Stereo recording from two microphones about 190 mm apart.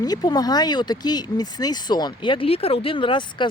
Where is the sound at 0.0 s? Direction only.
20° left (ahead or behind).